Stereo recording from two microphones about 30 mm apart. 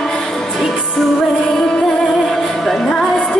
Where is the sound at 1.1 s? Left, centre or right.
Centre.